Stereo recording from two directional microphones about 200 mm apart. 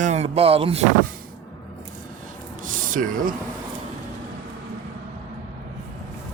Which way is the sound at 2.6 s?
40° right (ahead or behind).